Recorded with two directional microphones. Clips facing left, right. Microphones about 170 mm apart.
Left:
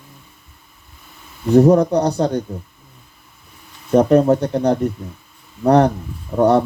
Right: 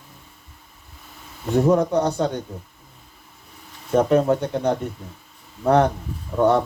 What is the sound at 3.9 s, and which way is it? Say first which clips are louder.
Speech: left 5 dB; 40° left (ahead or behind).